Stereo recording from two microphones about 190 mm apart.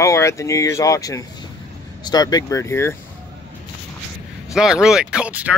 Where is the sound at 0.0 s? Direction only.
15° left (ahead or behind).